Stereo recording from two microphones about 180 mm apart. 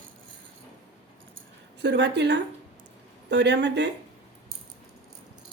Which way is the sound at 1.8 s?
70° right (ahead or behind).